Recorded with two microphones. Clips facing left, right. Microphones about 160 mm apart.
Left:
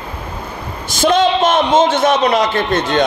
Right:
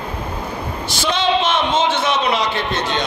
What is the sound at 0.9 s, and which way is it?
A man's voice, 45° left (ahead or behind).